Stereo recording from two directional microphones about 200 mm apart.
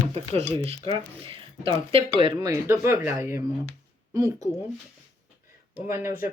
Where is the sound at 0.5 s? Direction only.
30° right (ahead or behind).